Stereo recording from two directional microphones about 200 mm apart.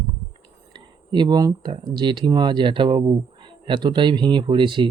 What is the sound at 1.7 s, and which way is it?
Speech, 25° right (ahead or behind).